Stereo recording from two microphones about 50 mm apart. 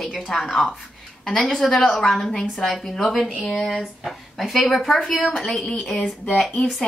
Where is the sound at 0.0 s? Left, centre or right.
Centre.